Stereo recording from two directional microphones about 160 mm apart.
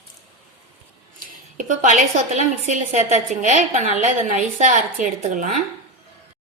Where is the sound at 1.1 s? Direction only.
55° right (ahead or behind).